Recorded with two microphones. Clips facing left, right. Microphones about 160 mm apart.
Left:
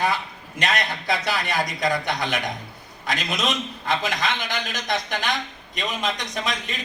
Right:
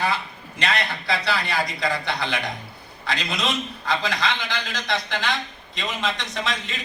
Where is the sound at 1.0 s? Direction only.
20° left (ahead or behind).